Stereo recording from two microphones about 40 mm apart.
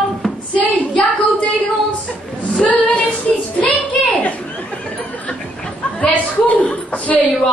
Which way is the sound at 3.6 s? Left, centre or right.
Left.